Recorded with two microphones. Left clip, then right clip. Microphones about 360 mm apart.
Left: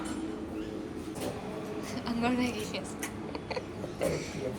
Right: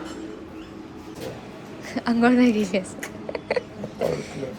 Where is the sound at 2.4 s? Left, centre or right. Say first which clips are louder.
Right 12 dB; centre.